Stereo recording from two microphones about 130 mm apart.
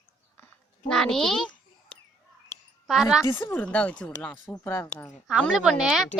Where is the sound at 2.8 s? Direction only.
Centre (ahead or behind).